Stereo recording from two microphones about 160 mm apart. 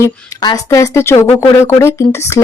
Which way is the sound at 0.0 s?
20° left (ahead or behind).